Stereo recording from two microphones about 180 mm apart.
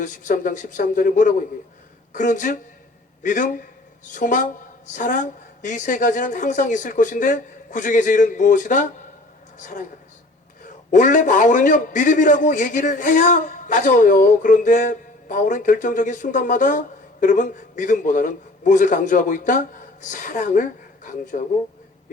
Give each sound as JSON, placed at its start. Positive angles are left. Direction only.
{"t": 0.0, "sound": "a man's voice", "side_deg": 45}